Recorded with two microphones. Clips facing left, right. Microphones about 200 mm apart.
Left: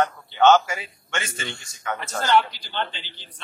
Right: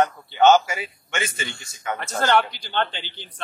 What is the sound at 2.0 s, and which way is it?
A man's voice, 60° right (ahead or behind).